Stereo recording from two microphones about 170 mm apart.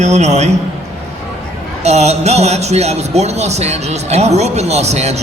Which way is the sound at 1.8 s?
40° right (ahead or behind).